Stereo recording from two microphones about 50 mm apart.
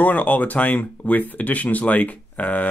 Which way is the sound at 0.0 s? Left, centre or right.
Left.